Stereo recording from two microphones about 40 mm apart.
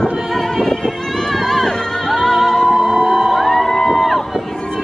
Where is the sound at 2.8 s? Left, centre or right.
Centre.